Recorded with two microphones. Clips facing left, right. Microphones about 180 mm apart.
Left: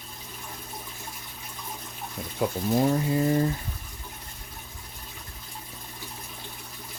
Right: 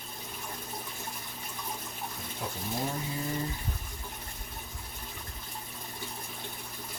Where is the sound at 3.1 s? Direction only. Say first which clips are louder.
Left 11 dB; 65° left (ahead or behind).